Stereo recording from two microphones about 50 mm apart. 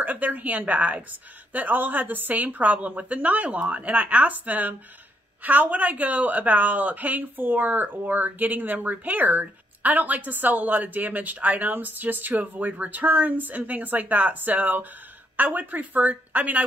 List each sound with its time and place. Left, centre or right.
0.0 s speech: right